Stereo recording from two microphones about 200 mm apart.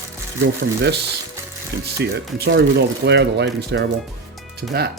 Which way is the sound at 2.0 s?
55° right (ahead or behind).